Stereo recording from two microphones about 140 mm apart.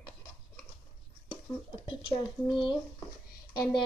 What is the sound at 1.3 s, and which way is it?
Speech, 35° left (ahead or behind).